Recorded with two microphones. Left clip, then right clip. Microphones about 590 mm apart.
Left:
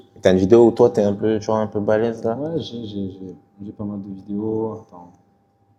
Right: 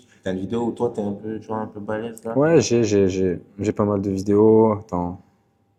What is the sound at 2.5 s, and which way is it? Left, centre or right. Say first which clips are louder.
Speech: right 11 dB; right.